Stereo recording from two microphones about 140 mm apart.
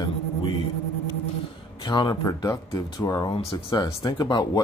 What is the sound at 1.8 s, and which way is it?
Speech, 30° left (ahead or behind).